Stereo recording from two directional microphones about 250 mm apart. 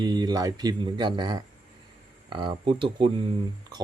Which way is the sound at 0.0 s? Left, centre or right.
Centre.